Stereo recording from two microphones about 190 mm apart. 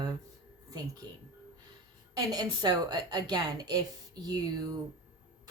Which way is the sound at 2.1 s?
20° right (ahead or behind).